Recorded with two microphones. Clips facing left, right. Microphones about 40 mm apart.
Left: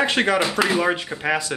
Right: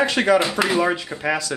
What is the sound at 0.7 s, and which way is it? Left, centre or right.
Speech, centre.